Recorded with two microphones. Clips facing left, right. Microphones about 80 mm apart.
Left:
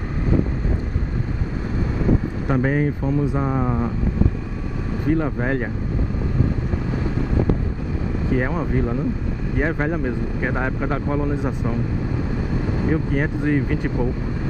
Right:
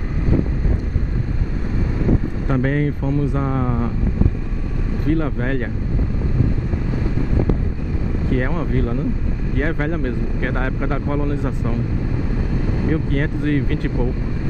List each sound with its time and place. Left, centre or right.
2.4 s speech: centre
5.0 s speech: centre
8.3 s speech: centre
12.8 s speech: centre